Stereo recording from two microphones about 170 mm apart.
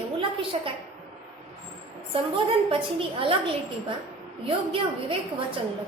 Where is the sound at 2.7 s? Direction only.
30° right (ahead or behind).